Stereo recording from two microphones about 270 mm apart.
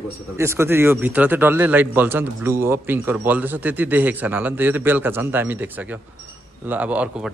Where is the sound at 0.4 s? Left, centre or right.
Centre.